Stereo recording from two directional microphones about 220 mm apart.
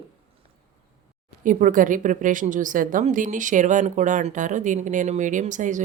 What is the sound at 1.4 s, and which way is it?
A woman's voice, 35° right (ahead or behind).